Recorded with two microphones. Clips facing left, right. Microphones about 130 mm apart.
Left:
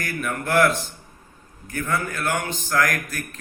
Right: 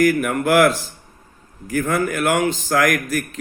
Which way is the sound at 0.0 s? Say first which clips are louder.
Right 11 dB; 90° right.